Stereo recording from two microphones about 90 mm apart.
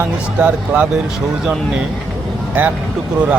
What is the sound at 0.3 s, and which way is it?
Speech, 15° right (ahead or behind).